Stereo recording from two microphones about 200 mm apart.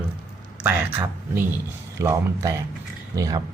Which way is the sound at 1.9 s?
15° right (ahead or behind).